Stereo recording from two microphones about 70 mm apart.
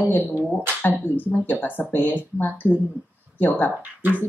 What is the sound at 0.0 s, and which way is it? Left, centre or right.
Speech, left.